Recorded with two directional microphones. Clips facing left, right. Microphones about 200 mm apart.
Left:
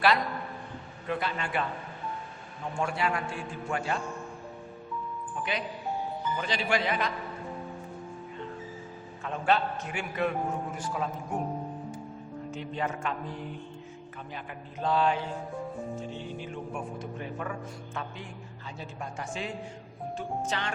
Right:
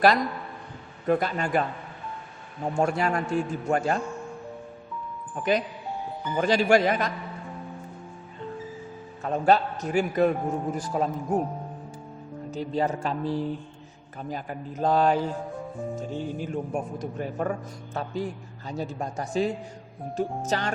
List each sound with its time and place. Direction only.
1.0 s a man's voice: 45° right (ahead or behind)
2.7 s a man's voice: 40° right (ahead or behind)
5.4 s a man's voice: 45° right (ahead or behind)
9.2 s a man's voice: 40° right (ahead or behind)
12.5 s a man's voice: 35° right (ahead or behind)